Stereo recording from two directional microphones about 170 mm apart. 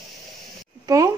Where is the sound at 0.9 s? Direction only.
20° right (ahead or behind).